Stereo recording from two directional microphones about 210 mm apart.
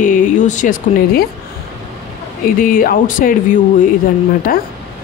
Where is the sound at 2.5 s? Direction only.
40° left (ahead or behind).